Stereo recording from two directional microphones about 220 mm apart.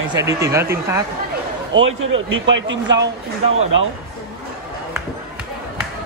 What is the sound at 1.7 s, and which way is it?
Speech, 60° right (ahead or behind).